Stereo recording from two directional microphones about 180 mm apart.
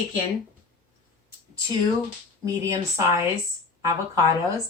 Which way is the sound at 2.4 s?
20° right (ahead or behind).